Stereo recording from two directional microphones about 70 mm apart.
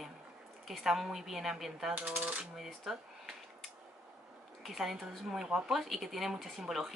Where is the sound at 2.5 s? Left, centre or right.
Centre.